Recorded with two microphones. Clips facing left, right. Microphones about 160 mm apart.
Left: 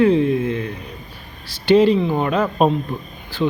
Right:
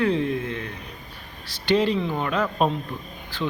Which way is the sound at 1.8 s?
10° left (ahead or behind).